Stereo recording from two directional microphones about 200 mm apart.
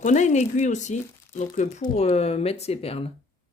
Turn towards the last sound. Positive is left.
turn(degrees=30)  # may be behind; listen again after turning